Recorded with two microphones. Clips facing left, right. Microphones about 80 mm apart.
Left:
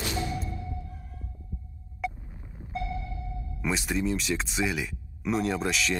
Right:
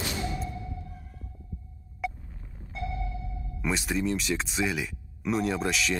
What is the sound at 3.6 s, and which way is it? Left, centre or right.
Speech, centre.